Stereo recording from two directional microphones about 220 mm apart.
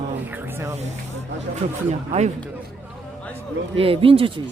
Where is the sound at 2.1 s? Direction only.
30° right (ahead or behind).